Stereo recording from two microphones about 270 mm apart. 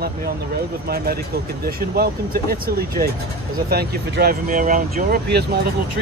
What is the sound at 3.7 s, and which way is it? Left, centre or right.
Speech, right.